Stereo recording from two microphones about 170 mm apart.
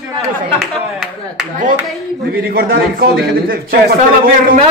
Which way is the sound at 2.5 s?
60° right (ahead or behind).